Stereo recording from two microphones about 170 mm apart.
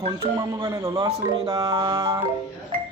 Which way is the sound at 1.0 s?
35° right (ahead or behind).